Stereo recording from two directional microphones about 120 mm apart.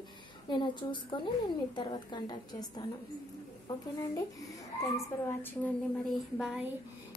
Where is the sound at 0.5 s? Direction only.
40° left (ahead or behind).